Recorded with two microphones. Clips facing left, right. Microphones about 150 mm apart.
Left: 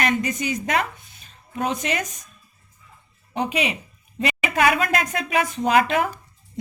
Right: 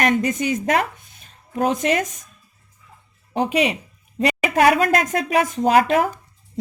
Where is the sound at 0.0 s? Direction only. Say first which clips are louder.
Right 4 dB; 50° right (ahead or behind).